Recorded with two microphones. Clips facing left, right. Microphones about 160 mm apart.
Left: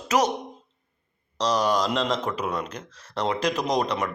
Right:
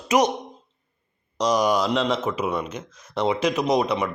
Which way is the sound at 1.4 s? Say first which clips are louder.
Right 2 dB; 10° right (ahead or behind).